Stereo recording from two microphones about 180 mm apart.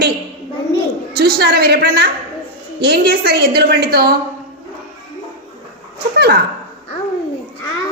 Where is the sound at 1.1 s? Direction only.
60° right (ahead or behind).